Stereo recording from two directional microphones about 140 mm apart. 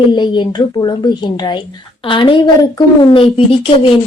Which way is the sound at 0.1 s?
30° left (ahead or behind).